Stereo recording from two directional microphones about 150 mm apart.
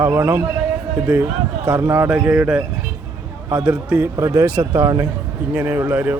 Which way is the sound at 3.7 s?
10° right (ahead or behind).